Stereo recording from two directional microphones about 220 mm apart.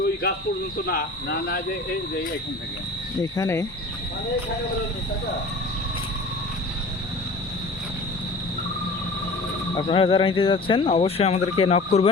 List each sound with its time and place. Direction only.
0.9 s speech: 45° left (ahead or behind)
3.3 s speech: 15° left (ahead or behind)
9.7 s speech: 20° left (ahead or behind)